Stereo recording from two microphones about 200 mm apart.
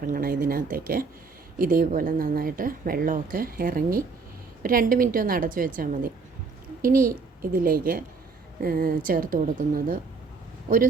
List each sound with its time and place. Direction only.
0.0 s a woman's voice: 45° right (ahead or behind)